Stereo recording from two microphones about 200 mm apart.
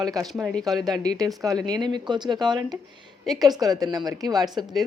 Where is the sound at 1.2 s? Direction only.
20° right (ahead or behind).